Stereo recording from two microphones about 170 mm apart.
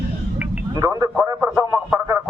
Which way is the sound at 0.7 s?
20° right (ahead or behind).